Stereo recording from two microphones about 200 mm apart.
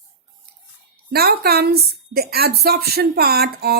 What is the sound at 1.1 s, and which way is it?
A woman's voice, 50° right (ahead or behind).